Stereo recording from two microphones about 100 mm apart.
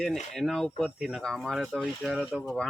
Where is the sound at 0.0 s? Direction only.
5° left (ahead or behind).